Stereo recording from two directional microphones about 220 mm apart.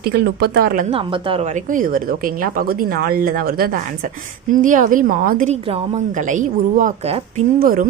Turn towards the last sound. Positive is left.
turn(degrees=-40)  # may be behind; listen again after turning